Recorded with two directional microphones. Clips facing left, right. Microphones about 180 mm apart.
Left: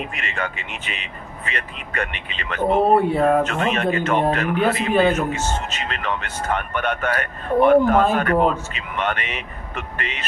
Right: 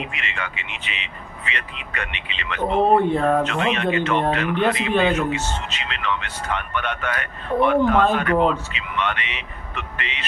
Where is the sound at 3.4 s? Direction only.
45° left (ahead or behind).